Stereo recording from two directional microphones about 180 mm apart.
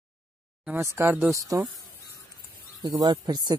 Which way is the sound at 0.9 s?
15° right (ahead or behind).